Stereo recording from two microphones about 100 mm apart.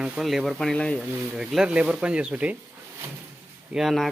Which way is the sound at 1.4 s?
5° right (ahead or behind).